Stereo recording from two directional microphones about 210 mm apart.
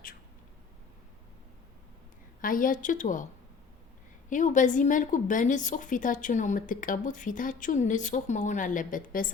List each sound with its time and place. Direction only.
2.4 s a woman's voice: 40° left (ahead or behind)
4.3 s a woman's voice: 35° left (ahead or behind)